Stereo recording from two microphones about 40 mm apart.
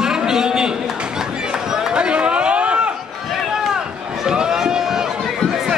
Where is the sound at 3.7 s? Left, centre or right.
Centre.